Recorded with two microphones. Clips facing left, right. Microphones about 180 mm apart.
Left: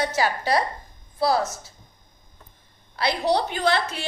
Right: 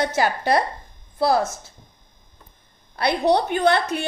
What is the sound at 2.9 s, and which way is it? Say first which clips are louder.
A woman's voice: right 3 dB; 55° right (ahead or behind).